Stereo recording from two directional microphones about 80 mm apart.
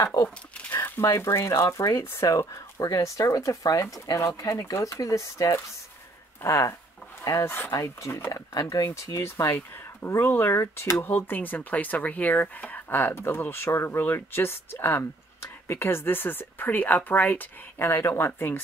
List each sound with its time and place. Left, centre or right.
0.0 s speech: left
0.7 s speech: left
1.0 s speech: left
2.2 s speech: left
7.7 s speech: left